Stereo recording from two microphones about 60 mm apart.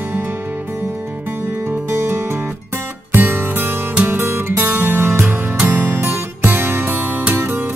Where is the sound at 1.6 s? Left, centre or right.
Right.